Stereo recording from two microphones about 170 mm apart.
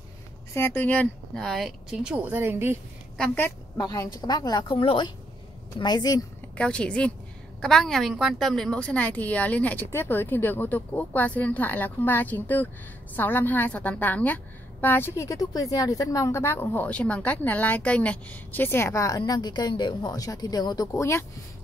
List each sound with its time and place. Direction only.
0.5 s speech: 15° left (ahead or behind); by 2.8 s 15° right (ahead or behind)
3.7 s a woman's voice: 20° left (ahead or behind)
6.5 s a woman's voice: 5° left (ahead or behind)